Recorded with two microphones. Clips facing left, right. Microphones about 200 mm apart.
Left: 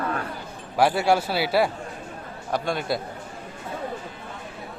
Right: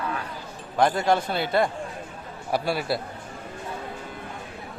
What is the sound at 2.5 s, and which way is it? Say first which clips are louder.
Speech: even; 5° right (ahead or behind).